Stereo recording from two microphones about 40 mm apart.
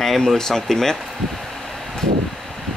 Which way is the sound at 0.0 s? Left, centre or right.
Centre.